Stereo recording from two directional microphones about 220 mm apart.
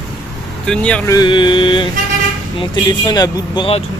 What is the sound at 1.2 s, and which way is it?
Speech, 20° left (ahead or behind).